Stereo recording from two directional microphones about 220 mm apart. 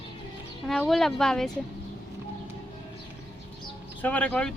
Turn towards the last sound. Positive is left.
turn(degrees=5)  # may be behind; listen again after turning